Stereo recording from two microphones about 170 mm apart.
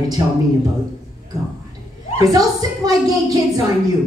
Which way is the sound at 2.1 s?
20° right (ahead or behind).